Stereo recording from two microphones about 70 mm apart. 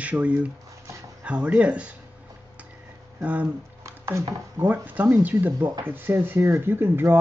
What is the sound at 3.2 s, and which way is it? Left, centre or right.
Speech, right.